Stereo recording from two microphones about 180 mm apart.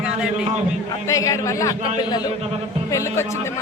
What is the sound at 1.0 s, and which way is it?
A man's voice, 20° left (ahead or behind).